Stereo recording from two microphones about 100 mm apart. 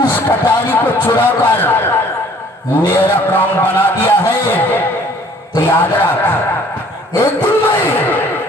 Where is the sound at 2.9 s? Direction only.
20° left (ahead or behind).